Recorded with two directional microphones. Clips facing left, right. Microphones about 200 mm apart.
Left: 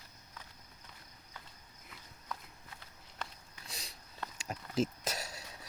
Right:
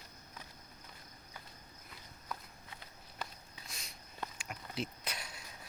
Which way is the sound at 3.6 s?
30° left (ahead or behind).